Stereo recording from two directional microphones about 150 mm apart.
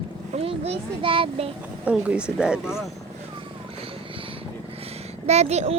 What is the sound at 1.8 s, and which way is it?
Speech, 5° right (ahead or behind).